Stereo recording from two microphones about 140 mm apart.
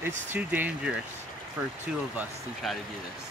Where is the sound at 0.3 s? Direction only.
10° right (ahead or behind).